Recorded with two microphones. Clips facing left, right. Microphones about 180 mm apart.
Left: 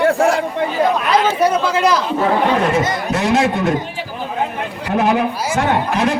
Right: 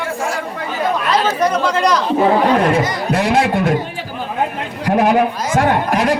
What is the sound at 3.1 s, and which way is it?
Speech, 60° right (ahead or behind).